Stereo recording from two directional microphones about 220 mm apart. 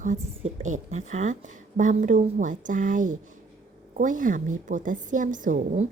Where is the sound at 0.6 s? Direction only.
35° right (ahead or behind).